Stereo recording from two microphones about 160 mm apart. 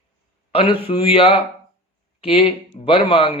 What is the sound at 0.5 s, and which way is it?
A man's voice, 35° left (ahead or behind).